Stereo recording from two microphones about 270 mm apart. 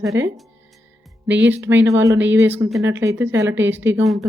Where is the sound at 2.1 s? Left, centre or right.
Right.